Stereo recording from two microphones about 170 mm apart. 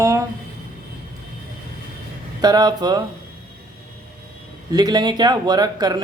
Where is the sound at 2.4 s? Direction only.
25° right (ahead or behind).